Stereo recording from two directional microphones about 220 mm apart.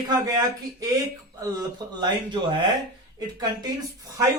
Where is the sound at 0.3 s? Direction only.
15° right (ahead or behind).